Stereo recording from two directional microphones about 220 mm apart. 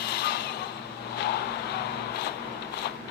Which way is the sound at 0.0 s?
50° left (ahead or behind).